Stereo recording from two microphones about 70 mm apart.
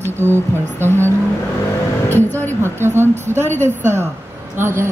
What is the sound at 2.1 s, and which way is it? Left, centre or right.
Music, left.